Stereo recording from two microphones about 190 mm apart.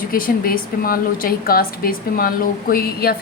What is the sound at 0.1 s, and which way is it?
A woman's voice, 50° left (ahead or behind).